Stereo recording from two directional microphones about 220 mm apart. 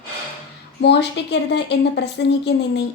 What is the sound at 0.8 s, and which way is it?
A woman's voice, 50° left (ahead or behind).